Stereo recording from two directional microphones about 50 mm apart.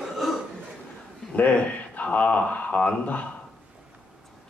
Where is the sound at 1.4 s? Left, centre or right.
Left.